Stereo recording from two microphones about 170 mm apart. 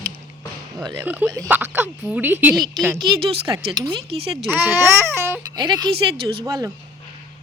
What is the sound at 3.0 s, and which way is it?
Speech, 25° right (ahead or behind).